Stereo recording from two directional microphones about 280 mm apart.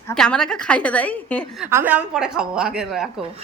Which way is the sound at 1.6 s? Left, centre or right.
Centre.